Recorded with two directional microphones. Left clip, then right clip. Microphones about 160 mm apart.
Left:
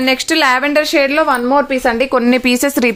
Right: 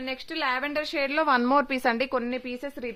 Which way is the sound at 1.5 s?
45° right (ahead or behind).